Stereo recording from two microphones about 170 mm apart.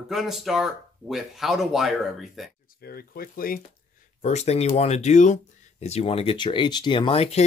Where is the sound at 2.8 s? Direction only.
60° left (ahead or behind).